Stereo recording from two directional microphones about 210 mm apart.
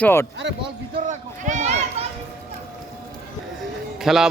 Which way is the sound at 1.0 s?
35° right (ahead or behind).